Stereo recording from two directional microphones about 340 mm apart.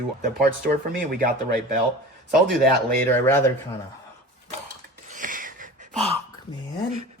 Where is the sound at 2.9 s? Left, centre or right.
Centre.